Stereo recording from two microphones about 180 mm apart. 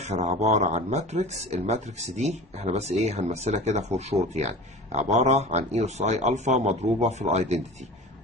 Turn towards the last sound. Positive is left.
turn(degrees=-40)  # may be behind; listen again after turning